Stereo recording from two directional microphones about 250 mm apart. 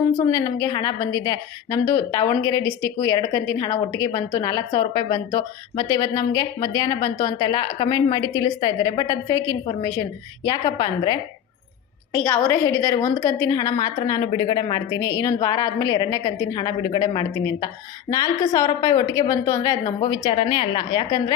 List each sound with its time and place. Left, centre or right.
0.2 s a woman's voice: centre